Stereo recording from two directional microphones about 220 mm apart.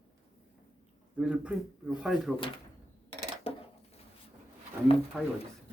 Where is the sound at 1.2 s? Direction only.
5° right (ahead or behind).